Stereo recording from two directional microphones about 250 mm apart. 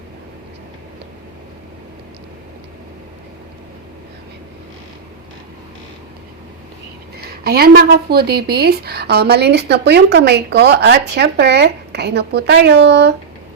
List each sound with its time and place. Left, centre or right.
7.4 s a woman's voice: right